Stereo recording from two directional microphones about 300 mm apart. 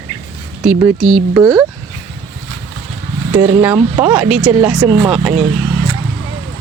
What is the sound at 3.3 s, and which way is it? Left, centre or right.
Speech, centre.